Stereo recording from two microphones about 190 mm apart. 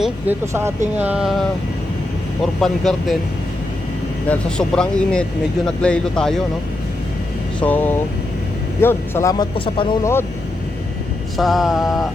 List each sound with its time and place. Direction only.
0.0 s speech: 10° right (ahead or behind)
2.6 s speech: centre (ahead or behind)
4.3 s speech: 5° left (ahead or behind)
7.6 s speech: 10° left (ahead or behind); by 9.9 s 25° left (ahead or behind)
10.0 s speech: 15° left (ahead or behind)
11.3 s speech: centre (ahead or behind)